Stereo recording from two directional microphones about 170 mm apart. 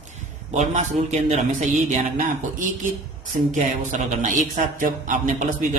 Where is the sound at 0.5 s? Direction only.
45° right (ahead or behind).